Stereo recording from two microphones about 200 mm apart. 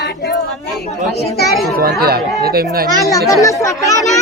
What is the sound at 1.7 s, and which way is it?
Speech, 50° right (ahead or behind).